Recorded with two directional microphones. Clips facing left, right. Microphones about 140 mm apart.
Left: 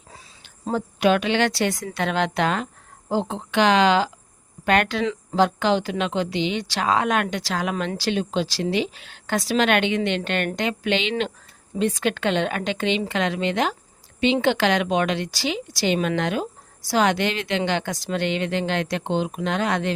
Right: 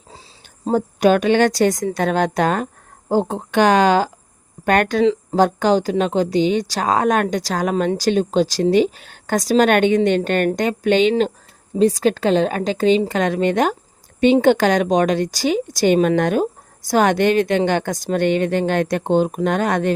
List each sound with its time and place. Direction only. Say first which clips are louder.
0.6 s a woman's voice: right 5 dB; 45° right (ahead or behind)